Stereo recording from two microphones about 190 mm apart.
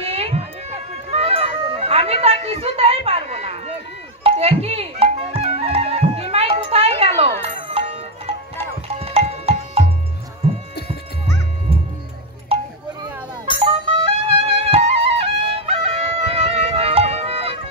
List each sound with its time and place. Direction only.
0.0 s music: 30° right (ahead or behind)
6.6 s a sound: 30° right (ahead or behind)
7.5 s music: 30° right (ahead or behind)
12.5 s tick-tock: 30° right (ahead or behind)
13.6 s music: 30° right (ahead or behind)